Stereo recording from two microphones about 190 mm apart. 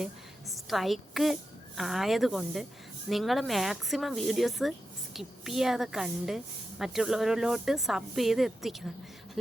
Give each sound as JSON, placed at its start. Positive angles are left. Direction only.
{"t": 0.0, "sound": "a woman's voice", "side_deg": 0}